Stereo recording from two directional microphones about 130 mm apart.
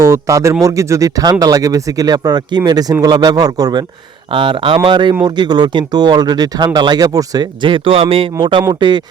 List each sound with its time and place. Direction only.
0.0 s speech: 25° right (ahead or behind)